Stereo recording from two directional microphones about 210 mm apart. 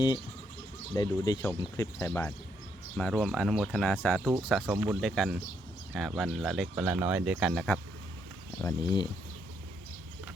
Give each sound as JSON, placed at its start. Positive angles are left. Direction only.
{"t": 0.9, "sound": "speech", "side_deg": 20}
{"t": 8.6, "sound": "speech", "side_deg": 20}